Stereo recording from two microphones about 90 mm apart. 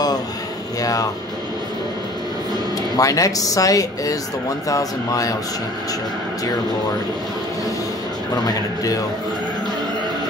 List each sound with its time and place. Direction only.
0.7 s speech: 45° left (ahead or behind)
3.0 s speech: 40° left (ahead or behind)
8.5 s speech: 40° left (ahead or behind)